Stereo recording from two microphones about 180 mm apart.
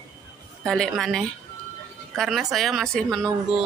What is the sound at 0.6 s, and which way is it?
Speech, 5° left (ahead or behind).